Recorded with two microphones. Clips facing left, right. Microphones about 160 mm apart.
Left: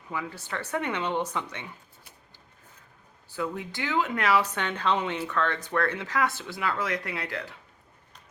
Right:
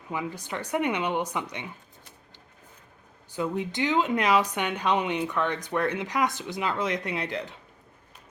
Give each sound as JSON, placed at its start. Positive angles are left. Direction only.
{"t": 0.1, "sound": "speech", "side_deg": -15}
{"t": 3.3, "sound": "speech", "side_deg": -20}